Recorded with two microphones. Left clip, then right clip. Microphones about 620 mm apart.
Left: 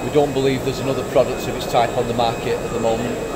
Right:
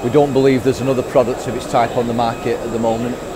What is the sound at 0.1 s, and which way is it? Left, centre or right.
Speech, right.